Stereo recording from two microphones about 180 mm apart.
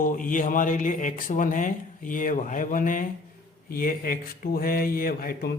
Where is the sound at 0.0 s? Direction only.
50° left (ahead or behind).